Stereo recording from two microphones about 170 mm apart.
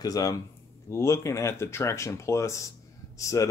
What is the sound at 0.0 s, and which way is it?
Speech, 20° left (ahead or behind).